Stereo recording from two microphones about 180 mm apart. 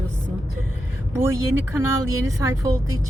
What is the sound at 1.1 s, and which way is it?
Speech, 15° right (ahead or behind).